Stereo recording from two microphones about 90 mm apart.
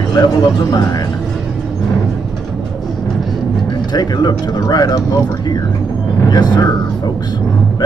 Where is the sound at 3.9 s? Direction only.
50° left (ahead or behind).